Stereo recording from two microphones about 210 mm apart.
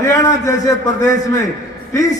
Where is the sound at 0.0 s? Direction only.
15° left (ahead or behind).